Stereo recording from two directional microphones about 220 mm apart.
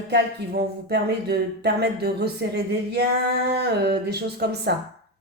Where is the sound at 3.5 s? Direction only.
50° right (ahead or behind).